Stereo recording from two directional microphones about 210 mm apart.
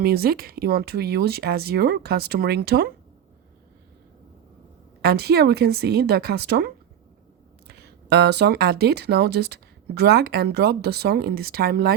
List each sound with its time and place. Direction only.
0.0 s speech: 45° right (ahead or behind)
5.0 s speech: 50° right (ahead or behind)
7.7 s speech: 50° right (ahead or behind)